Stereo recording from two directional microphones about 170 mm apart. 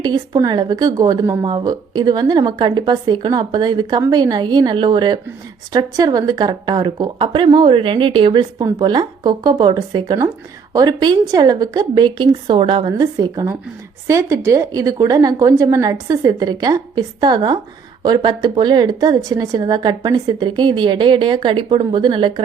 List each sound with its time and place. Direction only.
0.0 s speech: 25° right (ahead or behind)